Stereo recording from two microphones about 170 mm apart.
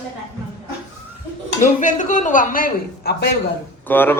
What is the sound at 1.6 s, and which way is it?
Speech, 50° left (ahead or behind).